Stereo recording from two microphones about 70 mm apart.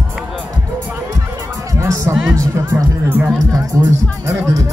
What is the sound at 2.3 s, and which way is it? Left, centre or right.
Speech, right.